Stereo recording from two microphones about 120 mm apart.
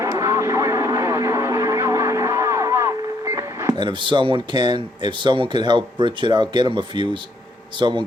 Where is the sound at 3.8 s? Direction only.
40° right (ahead or behind).